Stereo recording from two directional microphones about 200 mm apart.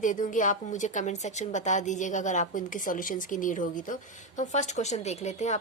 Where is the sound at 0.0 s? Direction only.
40° left (ahead or behind).